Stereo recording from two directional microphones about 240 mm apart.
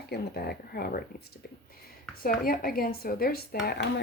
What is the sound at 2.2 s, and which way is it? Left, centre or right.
Speech, left.